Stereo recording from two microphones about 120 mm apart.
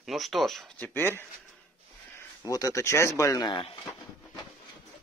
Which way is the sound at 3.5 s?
50° left (ahead or behind).